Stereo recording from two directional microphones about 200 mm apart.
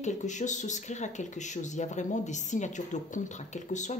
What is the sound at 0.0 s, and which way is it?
Speech, 35° left (ahead or behind).